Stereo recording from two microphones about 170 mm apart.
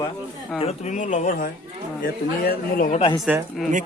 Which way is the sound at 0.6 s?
45° left (ahead or behind).